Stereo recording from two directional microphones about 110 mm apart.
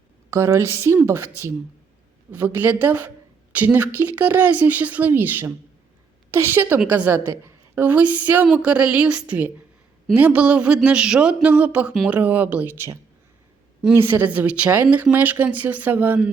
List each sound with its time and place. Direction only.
0.3 s a woman's voice: 25° right (ahead or behind)